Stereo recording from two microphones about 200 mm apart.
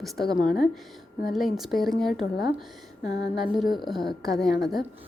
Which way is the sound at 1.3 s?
Centre (ahead or behind).